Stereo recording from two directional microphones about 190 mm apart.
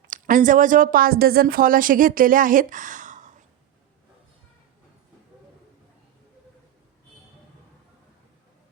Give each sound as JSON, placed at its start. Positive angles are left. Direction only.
{"t": 0.1, "sound": "speech", "side_deg": -45}